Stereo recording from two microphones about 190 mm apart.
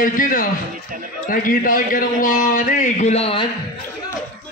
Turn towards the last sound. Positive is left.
turn(degrees=30)  # may be behind; listen again after turning